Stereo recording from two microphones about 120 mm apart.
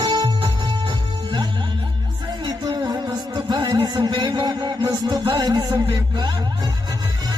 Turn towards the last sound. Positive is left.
turn(degrees=-35)  # may be behind; listen again after turning